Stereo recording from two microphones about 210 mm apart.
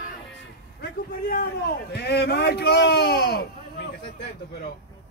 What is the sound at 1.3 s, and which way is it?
A man's voice, 45° left (ahead or behind).